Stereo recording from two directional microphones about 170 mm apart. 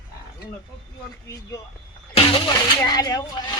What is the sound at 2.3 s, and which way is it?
Speech, 25° left (ahead or behind).